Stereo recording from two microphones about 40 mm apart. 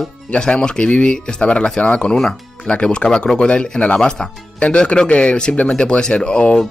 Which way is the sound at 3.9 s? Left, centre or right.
Centre.